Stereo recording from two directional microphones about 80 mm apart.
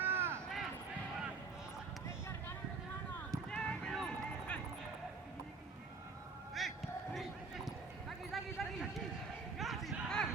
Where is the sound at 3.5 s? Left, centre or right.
Centre.